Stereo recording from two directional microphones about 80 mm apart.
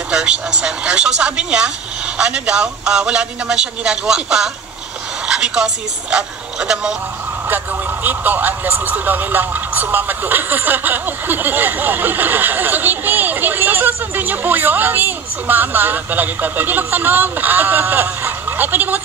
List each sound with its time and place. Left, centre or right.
0.1 s a man's voice: centre
7.4 s speech: right